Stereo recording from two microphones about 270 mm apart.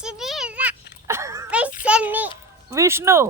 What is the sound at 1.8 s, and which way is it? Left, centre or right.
A child's voice, centre.